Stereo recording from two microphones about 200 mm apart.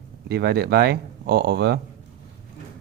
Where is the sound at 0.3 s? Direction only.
55° right (ahead or behind).